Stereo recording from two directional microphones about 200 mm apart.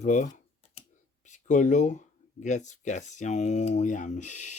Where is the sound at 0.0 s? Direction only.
40° left (ahead or behind).